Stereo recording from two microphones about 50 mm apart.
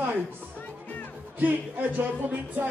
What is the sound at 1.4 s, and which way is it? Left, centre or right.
A man's voice, right.